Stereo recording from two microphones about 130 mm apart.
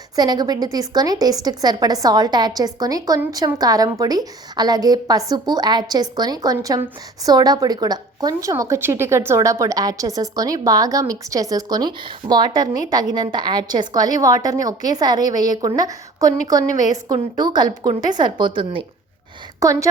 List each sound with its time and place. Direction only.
0.2 s a woman's voice: 30° right (ahead or behind)
19.5 s a woman's voice: 25° right (ahead or behind)